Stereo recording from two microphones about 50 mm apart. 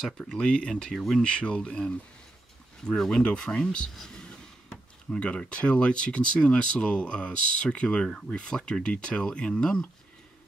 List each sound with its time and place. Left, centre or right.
0.2 s speech: centre
0.9 s speech: centre
1.2 s speech: left